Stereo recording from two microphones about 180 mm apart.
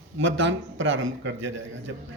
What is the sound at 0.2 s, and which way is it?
A man's voice, 90° right.